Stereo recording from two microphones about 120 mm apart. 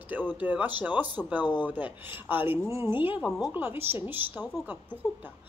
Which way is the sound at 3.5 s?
15° right (ahead or behind).